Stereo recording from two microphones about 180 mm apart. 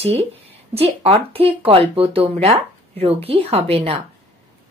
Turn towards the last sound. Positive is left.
turn(degrees=-30)  # may be behind; listen again after turning